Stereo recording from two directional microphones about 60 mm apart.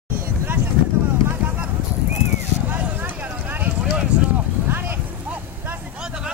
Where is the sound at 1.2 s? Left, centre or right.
Right.